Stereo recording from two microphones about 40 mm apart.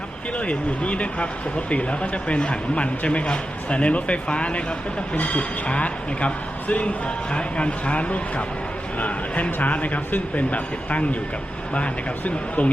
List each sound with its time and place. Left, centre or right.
0.3 s speech: left